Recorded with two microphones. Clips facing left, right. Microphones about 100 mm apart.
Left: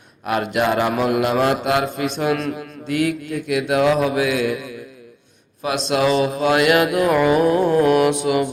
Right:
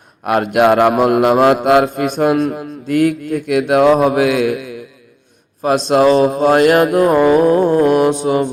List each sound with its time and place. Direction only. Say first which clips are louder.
0.3 s a man's voice: right 7 dB; 50° right (ahead or behind)
5.9 s mantra: right 7 dB; 40° right (ahead or behind)